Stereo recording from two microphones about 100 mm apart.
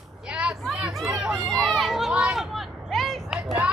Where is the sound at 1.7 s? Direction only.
Centre (ahead or behind).